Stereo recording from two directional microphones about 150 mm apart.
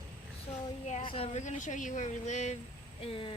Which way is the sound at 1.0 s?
35° left (ahead or behind).